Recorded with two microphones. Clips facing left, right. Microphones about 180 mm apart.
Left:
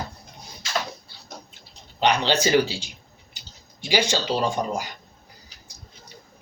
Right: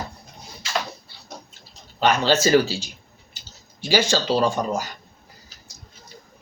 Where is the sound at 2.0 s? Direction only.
15° left (ahead or behind).